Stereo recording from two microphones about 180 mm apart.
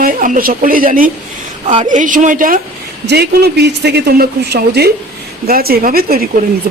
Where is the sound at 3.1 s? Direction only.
65° right (ahead or behind).